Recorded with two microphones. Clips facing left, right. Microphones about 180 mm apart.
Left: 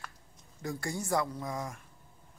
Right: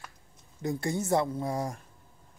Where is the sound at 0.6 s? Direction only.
20° right (ahead or behind).